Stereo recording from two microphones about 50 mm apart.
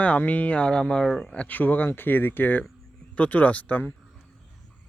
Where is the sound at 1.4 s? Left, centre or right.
Left.